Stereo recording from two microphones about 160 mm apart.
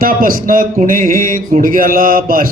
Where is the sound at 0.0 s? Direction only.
60° right (ahead or behind).